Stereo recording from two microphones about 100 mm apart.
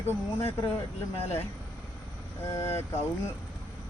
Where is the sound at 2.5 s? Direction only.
25° left (ahead or behind).